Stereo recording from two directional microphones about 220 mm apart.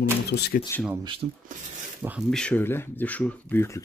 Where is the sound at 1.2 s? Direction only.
35° right (ahead or behind).